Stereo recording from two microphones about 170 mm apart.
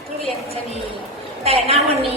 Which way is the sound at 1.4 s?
35° right (ahead or behind).